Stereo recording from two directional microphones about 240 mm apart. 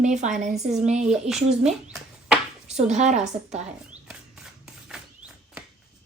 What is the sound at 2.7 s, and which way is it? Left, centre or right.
Speech, right.